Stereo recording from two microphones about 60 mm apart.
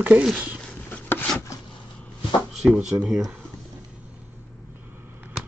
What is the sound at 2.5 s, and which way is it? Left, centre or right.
Speech, centre.